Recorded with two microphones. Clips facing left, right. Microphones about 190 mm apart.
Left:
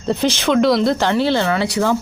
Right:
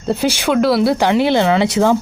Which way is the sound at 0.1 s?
10° right (ahead or behind).